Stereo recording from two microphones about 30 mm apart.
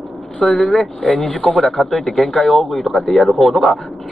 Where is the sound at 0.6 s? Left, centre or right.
Left.